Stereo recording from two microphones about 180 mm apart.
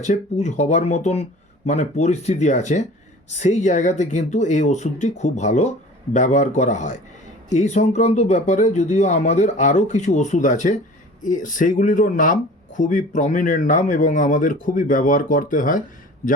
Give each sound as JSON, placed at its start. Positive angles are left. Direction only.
{"t": 0.0, "sound": "speech", "side_deg": 40}